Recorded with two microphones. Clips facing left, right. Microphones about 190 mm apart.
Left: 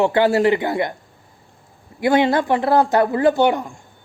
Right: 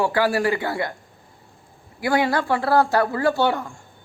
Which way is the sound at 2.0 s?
20° left (ahead or behind).